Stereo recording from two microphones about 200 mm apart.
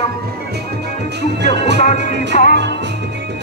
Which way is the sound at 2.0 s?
60° right (ahead or behind).